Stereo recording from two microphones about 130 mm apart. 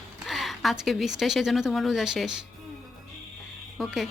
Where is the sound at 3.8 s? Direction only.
Centre (ahead or behind).